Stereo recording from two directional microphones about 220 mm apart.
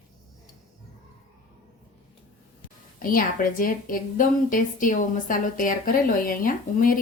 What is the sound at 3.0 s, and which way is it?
A woman's voice, 40° left (ahead or behind).